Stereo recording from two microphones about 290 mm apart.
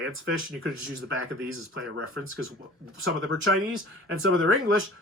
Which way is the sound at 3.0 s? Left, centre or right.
Right.